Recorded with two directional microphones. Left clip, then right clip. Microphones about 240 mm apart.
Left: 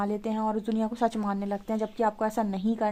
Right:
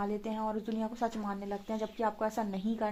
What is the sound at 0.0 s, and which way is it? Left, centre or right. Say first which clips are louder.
Speech: left 6 dB; left.